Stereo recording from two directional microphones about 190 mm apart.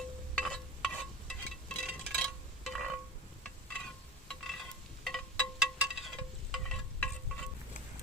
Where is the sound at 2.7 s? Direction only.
Centre (ahead or behind).